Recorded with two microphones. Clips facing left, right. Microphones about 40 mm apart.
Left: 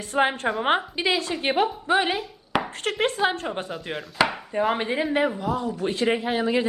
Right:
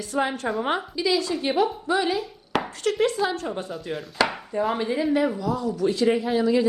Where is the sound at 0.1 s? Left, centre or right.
Left.